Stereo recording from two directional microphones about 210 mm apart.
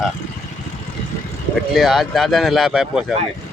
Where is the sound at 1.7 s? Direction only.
Centre (ahead or behind).